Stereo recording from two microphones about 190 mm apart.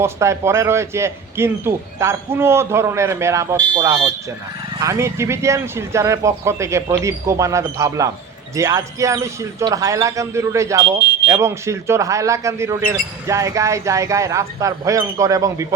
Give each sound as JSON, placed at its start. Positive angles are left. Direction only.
{"t": 0.0, "sound": "speech", "side_deg": -15}